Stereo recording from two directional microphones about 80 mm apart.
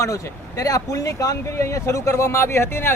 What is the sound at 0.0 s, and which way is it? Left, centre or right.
A man's voice, left.